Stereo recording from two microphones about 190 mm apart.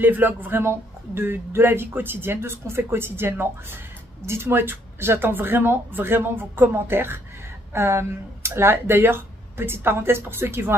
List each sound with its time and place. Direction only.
0.0 s speech: 10° right (ahead or behind)